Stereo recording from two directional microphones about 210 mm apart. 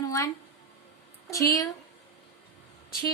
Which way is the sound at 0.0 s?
15° left (ahead or behind).